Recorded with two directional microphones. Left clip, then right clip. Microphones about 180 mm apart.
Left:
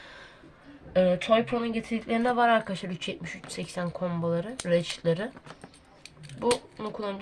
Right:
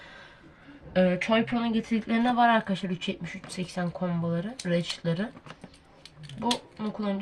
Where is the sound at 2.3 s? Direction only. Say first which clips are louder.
Right 1 dB; 30° left (ahead or behind).